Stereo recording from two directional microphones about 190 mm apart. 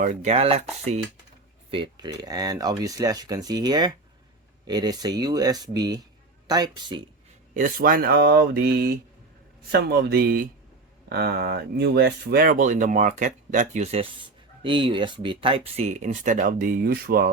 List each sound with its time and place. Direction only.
0.0 s speech: 35° right (ahead or behind)
7.5 s speech: 45° right (ahead or behind)